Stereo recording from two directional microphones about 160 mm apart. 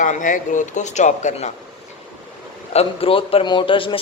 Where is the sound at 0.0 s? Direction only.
50° left (ahead or behind).